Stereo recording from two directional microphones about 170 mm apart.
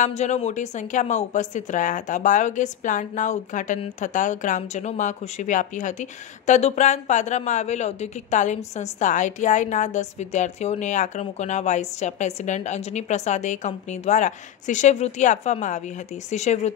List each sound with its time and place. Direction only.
0.0 s a woman's voice: 45° left (ahead or behind)